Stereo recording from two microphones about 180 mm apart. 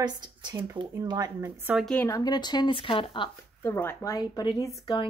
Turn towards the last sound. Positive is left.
turn(degrees=20)  # may be behind; listen again after turning